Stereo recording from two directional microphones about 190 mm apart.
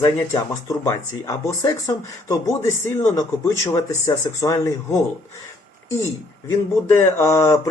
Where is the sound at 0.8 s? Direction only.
15° left (ahead or behind).